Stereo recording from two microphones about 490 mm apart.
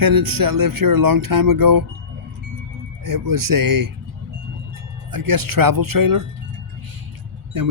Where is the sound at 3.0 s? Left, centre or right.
Right.